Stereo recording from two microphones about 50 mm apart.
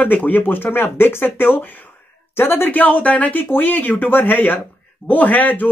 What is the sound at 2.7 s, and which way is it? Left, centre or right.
Speech, left.